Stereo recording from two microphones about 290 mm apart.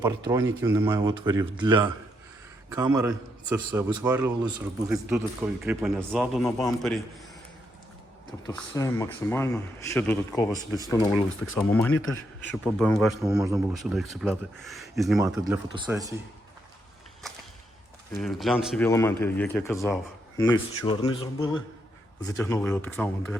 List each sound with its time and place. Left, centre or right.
0.0 s speech: centre
8.4 s speech: centre
12.0 s a man's voice: left
12.6 s speech: centre
15.2 s speech: centre
18.1 s speech: centre